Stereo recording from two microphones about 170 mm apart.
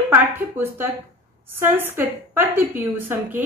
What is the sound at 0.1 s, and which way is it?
A woman's voice, 10° right (ahead or behind).